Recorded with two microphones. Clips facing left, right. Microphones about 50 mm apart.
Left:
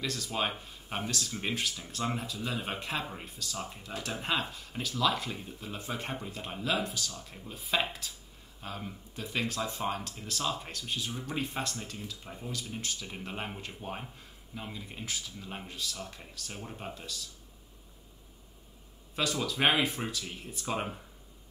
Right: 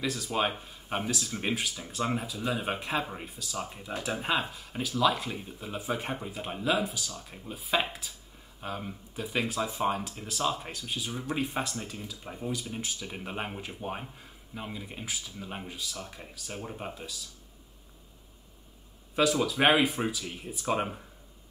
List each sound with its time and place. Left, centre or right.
0.0 s speech: centre
11.1 s speech: centre
11.3 s speech: centre
19.1 s speech: centre